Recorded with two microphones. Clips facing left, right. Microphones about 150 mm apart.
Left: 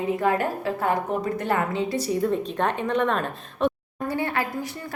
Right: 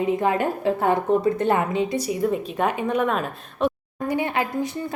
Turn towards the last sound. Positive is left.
turn(degrees=-20)  # may be behind; listen again after turning